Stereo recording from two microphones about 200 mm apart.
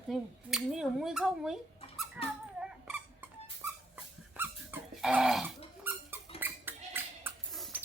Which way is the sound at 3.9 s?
5° right (ahead or behind).